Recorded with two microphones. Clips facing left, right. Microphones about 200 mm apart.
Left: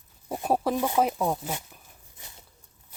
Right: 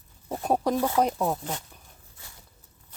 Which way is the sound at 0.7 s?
15° left (ahead or behind).